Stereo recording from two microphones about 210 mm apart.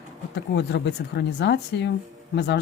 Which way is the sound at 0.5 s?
55° left (ahead or behind).